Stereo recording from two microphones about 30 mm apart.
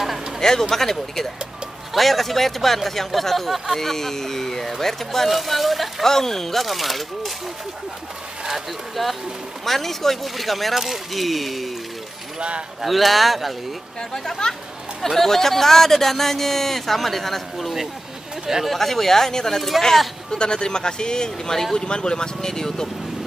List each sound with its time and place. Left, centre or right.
0.4 s speech: centre
3.7 s speech: centre
5.3 s speech: centre
6.0 s speech: centre
6.6 s speech: centre
9.0 s speech: centre
12.4 s speech: right
12.8 s speech: centre
14.4 s a man's voice: left
15.0 s speech: centre
20.2 s a man's voice: left